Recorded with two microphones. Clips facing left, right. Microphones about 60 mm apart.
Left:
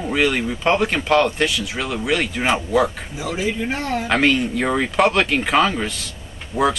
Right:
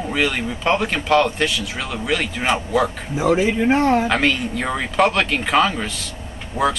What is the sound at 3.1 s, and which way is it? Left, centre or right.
Speech, right.